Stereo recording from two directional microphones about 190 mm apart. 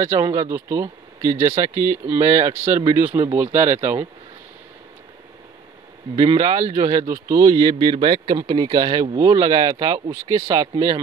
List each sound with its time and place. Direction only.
0.0 s speech: 15° right (ahead or behind)
6.3 s speech: 20° right (ahead or behind)